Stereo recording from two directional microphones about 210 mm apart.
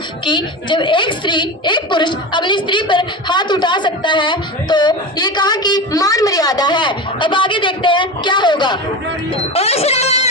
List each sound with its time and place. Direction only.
0.3 s a woman's voice: 20° left (ahead or behind)